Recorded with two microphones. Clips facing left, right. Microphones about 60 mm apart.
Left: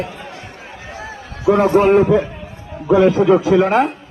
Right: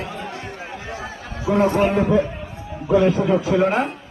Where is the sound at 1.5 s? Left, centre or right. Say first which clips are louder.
Left 6 dB; left.